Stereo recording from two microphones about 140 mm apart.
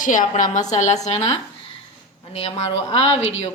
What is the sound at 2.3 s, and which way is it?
Speech, 45° left (ahead or behind).